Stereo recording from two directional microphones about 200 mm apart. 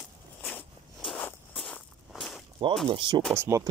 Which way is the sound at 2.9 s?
25° right (ahead or behind).